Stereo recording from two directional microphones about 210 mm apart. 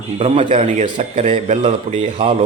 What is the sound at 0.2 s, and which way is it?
A man's voice, 30° right (ahead or behind).